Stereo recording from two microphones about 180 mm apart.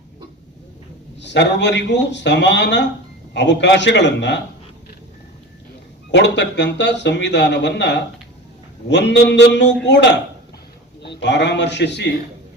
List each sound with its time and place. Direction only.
1.2 s speech: 75° left (ahead or behind)
6.1 s speech: 75° left (ahead or behind)